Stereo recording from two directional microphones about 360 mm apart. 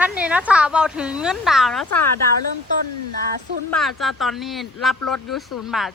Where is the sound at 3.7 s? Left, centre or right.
Centre.